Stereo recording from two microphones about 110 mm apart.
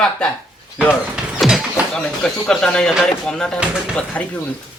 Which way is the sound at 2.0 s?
10° left (ahead or behind).